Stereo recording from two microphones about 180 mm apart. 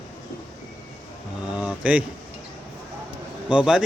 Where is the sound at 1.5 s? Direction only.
5° right (ahead or behind).